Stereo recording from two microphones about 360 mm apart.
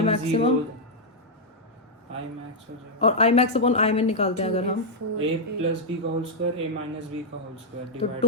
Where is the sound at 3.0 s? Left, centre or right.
Centre.